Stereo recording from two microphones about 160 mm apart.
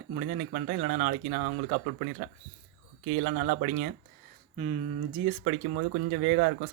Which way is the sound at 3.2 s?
75° right (ahead or behind).